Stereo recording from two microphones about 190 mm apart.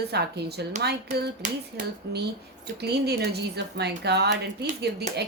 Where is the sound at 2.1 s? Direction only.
65° right (ahead or behind).